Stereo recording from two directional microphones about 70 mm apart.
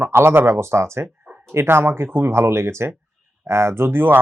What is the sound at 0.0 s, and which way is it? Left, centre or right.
Speech, right.